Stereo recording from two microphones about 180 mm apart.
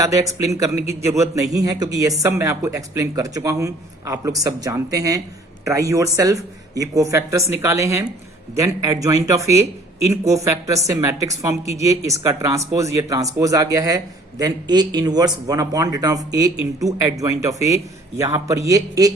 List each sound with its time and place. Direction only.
0.0 s a man's voice: 20° right (ahead or behind)